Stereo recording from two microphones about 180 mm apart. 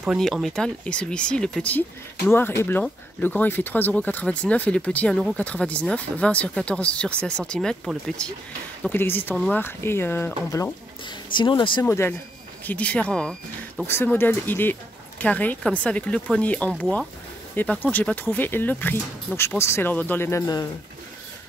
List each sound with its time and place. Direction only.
0.0 s speech: centre (ahead or behind); by 10.7 s 15° left (ahead or behind)
11.3 s speech: 25° left (ahead or behind)
11.8 s speech: 10° left (ahead or behind)